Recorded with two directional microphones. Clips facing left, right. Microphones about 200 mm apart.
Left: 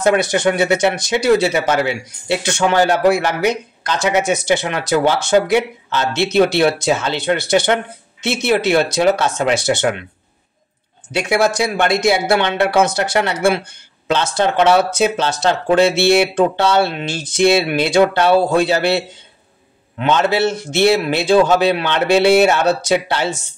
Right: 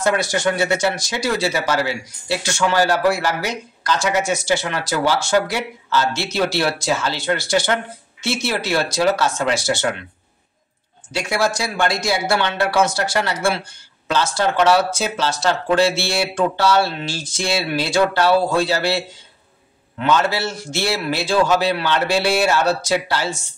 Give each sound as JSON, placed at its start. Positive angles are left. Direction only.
{"t": 0.0, "sound": "speech", "side_deg": 20}
{"t": 11.3, "sound": "speech", "side_deg": 20}